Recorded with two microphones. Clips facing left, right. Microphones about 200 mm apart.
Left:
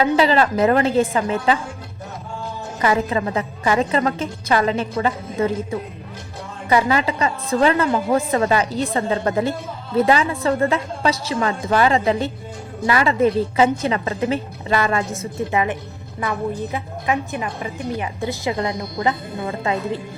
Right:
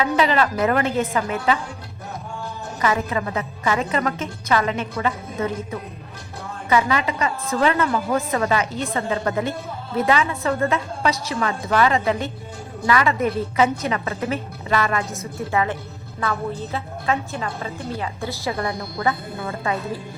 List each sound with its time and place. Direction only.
0.0 s a woman's voice: 30° left (ahead or behind)
2.8 s a woman's voice: 30° left (ahead or behind)
6.7 s a woman's voice: 35° left (ahead or behind)
15.5 s a woman's voice: 20° left (ahead or behind)